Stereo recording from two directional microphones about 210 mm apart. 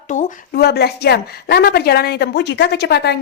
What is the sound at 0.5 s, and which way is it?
A woman's voice, 50° left (ahead or behind).